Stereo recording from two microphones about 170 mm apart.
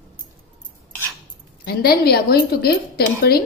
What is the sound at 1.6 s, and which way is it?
A woman's voice, 65° left (ahead or behind).